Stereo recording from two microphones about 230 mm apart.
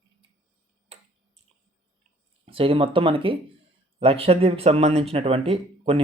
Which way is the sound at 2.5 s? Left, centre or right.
Right.